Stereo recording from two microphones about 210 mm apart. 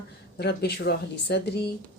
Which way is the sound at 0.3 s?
50° left (ahead or behind).